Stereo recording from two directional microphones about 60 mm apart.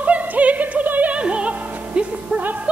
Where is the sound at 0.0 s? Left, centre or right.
Right.